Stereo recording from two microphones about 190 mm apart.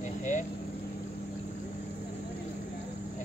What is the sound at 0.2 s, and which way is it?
Vehicle, 40° left (ahead or behind).